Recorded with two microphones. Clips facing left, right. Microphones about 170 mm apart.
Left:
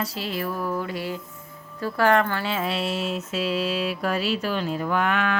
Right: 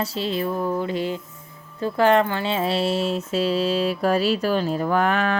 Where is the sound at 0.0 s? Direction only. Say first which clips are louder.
Right 4 dB; 25° right (ahead or behind).